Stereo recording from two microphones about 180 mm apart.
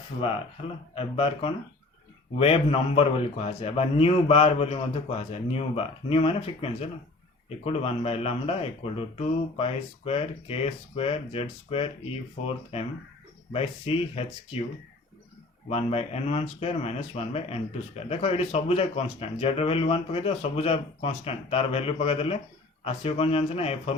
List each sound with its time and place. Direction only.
0.9 s speech: 35° left (ahead or behind)
15.7 s speech: 35° left (ahead or behind)